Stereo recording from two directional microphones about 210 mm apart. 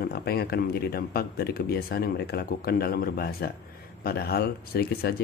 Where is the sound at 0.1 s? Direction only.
45° left (ahead or behind).